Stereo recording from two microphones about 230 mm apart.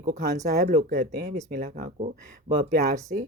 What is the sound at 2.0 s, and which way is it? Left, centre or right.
Speech, right.